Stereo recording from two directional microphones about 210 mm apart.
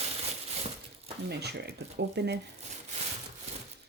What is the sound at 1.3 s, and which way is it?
Speech, 50° right (ahead or behind).